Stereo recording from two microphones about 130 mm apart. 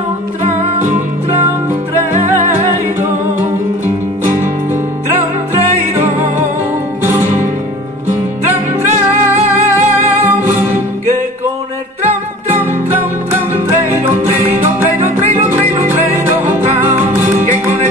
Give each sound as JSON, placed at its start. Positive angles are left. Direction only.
{"t": 0.4, "sound": "music", "side_deg": -70}
{"t": 2.5, "sound": "music", "side_deg": -15}
{"t": 3.8, "sound": "music", "side_deg": -75}
{"t": 5.6, "sound": "music", "side_deg": -65}
{"t": 8.8, "sound": "music", "side_deg": -65}
{"t": 10.2, "sound": "music", "side_deg": -15}
{"t": 12.8, "sound": "music", "side_deg": -15}
{"t": 15.0, "sound": "music", "side_deg": -65}
{"t": 15.4, "sound": "music", "side_deg": -15}